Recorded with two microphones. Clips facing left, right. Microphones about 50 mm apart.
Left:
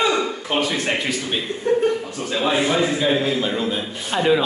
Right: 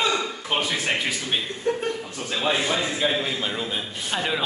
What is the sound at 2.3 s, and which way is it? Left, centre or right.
Speech, centre.